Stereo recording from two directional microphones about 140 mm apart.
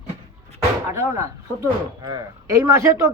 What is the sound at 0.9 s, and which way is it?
Speech, 20° right (ahead or behind).